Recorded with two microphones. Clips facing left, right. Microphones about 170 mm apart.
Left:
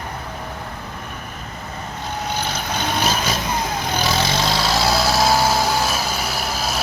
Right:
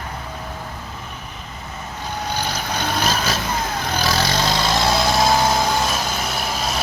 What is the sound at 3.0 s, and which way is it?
Vehicle, 10° left (ahead or behind).